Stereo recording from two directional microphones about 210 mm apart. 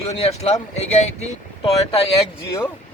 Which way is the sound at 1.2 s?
25° left (ahead or behind).